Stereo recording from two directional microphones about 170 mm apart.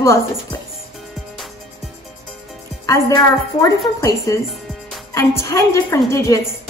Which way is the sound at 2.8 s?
20° left (ahead or behind).